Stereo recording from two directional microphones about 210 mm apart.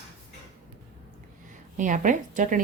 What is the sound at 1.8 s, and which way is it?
Speech, 35° right (ahead or behind).